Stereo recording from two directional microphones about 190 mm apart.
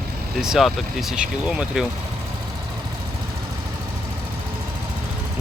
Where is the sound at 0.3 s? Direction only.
Centre (ahead or behind).